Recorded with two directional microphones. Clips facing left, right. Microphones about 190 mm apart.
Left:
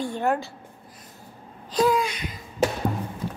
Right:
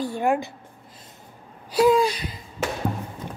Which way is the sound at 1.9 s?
35° right (ahead or behind).